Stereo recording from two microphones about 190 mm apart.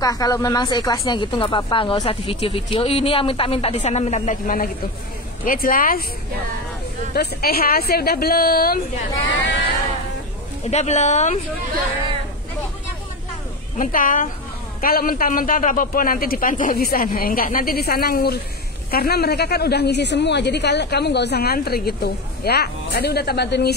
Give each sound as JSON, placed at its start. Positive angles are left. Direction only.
{"t": 0.0, "sound": "a man's voice", "side_deg": 20}
{"t": 7.2, "sound": "a man's voice", "side_deg": 55}
{"t": 10.7, "sound": "speech", "side_deg": 35}
{"t": 13.7, "sound": "a man's voice", "side_deg": 45}